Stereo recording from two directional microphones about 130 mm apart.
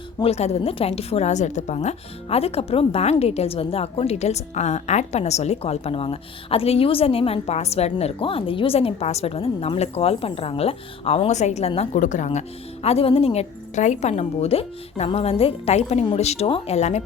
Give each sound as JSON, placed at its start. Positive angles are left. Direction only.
{"t": 0.2, "sound": "a woman's voice", "side_deg": 55}
{"t": 11.9, "sound": "a woman's voice", "side_deg": 70}